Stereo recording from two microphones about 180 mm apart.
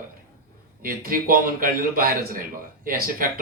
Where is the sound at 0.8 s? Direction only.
55° right (ahead or behind).